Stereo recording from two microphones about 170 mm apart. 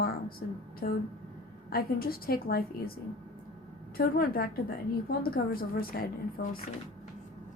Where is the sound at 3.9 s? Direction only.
60° left (ahead or behind).